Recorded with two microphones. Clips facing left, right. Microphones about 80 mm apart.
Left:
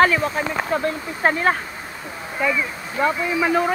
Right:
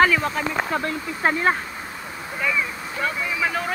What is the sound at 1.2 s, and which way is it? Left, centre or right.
Speech, left.